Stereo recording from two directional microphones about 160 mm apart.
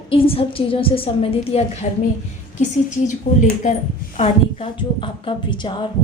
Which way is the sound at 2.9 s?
50° left (ahead or behind).